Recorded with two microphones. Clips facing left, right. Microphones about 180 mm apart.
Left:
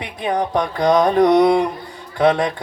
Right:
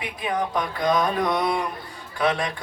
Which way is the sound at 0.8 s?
75° left (ahead or behind).